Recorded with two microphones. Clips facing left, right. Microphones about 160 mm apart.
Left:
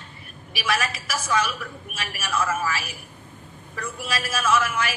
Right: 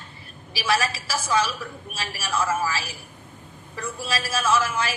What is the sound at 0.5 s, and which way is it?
A woman's voice, 30° right (ahead or behind).